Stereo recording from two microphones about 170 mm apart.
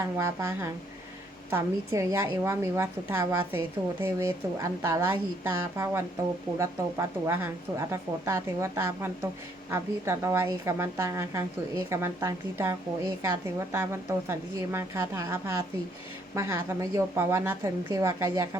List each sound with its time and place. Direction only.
0.0 s a woman's voice: 15° right (ahead or behind)